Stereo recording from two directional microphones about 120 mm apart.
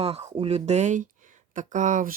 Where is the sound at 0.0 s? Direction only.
60° right (ahead or behind).